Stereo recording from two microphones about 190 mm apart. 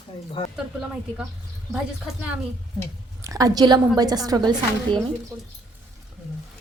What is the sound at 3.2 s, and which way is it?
A woman's voice, 20° right (ahead or behind).